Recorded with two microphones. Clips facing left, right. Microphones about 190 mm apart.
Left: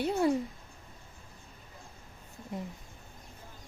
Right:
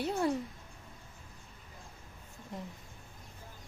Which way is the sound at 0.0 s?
5° left (ahead or behind).